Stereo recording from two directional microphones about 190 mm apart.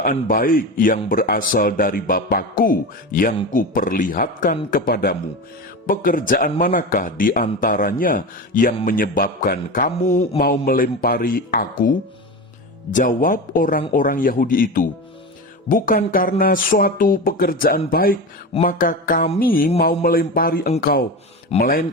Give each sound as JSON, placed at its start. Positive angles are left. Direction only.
{"t": 0.0, "sound": "speech", "side_deg": 50}